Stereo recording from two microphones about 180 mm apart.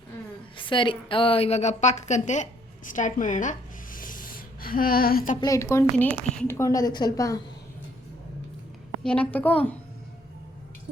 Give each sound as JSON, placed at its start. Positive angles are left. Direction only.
{"t": 0.5, "sound": "a woman's voice", "side_deg": 25}
{"t": 5.4, "sound": "a woman's voice", "side_deg": 15}
{"t": 9.0, "sound": "a woman's voice", "side_deg": 5}